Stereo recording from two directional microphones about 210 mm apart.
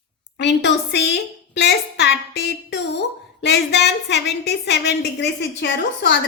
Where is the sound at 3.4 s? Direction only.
55° left (ahead or behind).